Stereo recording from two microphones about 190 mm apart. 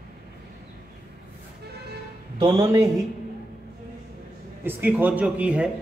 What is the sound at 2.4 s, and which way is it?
Speech, 20° right (ahead or behind).